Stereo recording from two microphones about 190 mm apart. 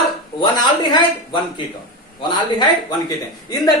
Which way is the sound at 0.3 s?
25° left (ahead or behind).